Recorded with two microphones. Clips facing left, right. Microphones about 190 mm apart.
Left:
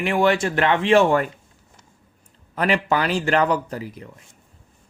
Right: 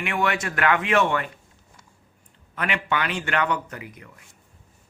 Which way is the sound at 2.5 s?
35° left (ahead or behind).